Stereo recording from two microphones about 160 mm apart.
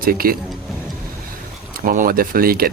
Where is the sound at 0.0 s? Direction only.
65° right (ahead or behind).